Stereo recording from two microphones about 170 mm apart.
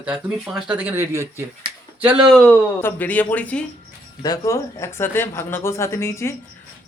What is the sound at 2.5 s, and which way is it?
Speech, 10° left (ahead or behind).